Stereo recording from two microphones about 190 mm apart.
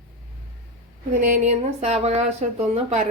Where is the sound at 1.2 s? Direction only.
40° right (ahead or behind).